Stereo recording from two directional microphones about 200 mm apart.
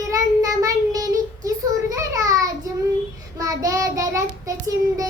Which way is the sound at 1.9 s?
15° right (ahead or behind).